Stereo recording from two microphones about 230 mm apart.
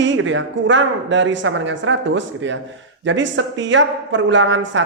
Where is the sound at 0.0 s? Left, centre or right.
Right.